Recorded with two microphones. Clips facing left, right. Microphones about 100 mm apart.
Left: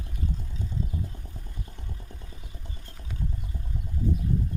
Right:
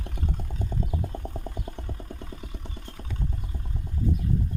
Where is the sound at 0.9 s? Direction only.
70° right (ahead or behind).